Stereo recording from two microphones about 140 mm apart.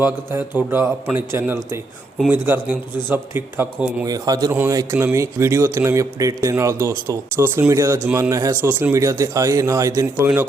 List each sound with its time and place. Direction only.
0.0 s a man's voice: 15° right (ahead or behind)
4.0 s speech: 25° right (ahead or behind)